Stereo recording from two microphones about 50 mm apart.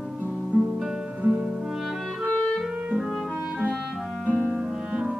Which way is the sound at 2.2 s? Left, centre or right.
Left.